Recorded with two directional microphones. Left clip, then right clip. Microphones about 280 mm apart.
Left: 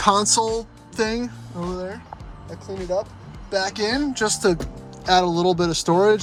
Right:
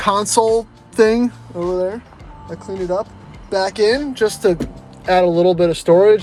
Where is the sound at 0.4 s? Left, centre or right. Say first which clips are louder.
Right 9 dB; centre.